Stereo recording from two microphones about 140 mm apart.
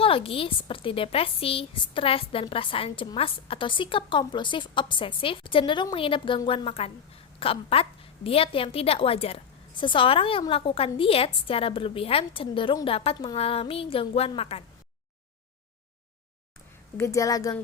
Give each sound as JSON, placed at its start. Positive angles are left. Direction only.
{"t": 0.0, "sound": "a woman's voice", "side_deg": 40}
{"t": 17.0, "sound": "a woman's voice", "side_deg": 25}